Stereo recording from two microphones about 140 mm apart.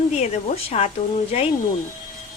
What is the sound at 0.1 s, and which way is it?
Speech, 50° left (ahead or behind).